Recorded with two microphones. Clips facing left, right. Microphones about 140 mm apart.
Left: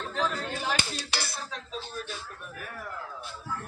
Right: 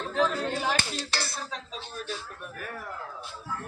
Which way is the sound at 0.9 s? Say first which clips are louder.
Right 2 dB; 10° left (ahead or behind).